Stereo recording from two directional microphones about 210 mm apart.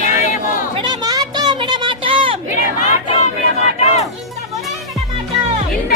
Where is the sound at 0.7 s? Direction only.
20° right (ahead or behind).